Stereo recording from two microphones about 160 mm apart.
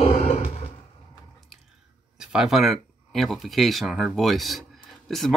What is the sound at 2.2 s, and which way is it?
Speech, 5° right (ahead or behind).